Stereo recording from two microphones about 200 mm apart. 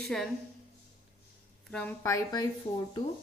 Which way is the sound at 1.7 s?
10° left (ahead or behind).